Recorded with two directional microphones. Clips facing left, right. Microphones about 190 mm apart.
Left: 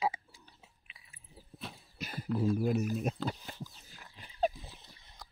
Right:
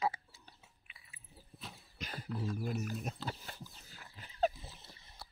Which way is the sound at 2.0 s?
10° left (ahead or behind).